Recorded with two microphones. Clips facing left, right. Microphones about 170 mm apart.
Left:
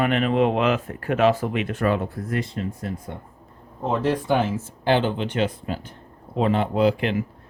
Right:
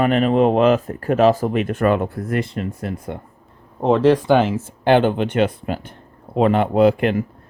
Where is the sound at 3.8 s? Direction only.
85° right; by 7.2 s 50° right (ahead or behind).